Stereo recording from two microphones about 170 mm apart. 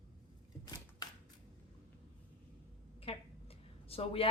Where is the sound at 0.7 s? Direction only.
20° left (ahead or behind).